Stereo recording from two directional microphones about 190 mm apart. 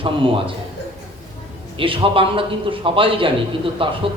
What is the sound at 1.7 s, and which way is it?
A man's voice, 30° right (ahead or behind).